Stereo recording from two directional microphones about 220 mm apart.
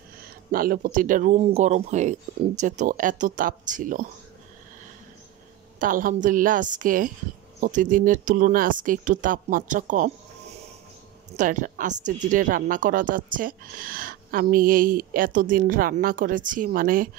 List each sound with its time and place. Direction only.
0.2 s speech: 40° right (ahead or behind)
5.8 s speech: 40° right (ahead or behind)
11.3 s speech: 35° right (ahead or behind)